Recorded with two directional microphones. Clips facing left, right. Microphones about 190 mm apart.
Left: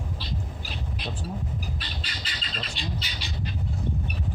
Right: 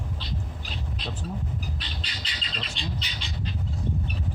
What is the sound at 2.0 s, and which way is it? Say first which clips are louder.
Squawk: left 1 dB; 5° left (ahead or behind).